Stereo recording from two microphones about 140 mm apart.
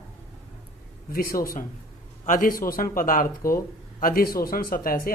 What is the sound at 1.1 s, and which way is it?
Speech, 90° left.